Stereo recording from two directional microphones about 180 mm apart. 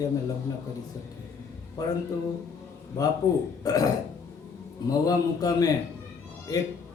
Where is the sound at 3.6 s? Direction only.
20° left (ahead or behind).